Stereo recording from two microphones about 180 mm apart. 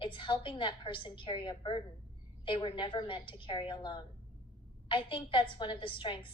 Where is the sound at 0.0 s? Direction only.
30° left (ahead or behind).